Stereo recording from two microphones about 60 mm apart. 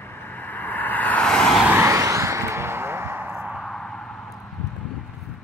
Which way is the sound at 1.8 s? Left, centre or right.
Right.